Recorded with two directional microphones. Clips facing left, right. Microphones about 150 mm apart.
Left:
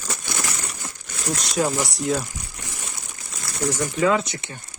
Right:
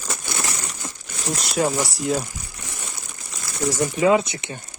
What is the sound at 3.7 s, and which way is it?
Speech, 15° right (ahead or behind).